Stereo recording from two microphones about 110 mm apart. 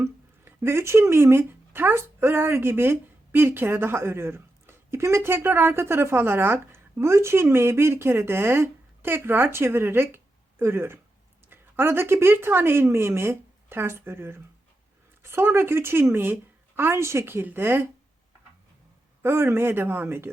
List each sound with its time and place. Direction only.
0.0 s a woman's voice: 25° right (ahead or behind)
19.2 s speech: 20° right (ahead or behind)